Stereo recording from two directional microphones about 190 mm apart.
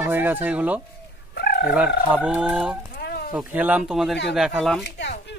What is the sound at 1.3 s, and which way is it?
Chicken, 55° left (ahead or behind).